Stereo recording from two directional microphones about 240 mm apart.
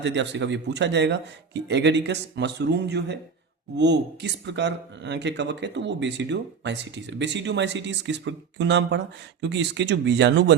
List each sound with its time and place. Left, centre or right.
0.0 s speech: right